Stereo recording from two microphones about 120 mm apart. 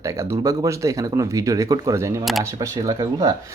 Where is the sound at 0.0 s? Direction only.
25° right (ahead or behind).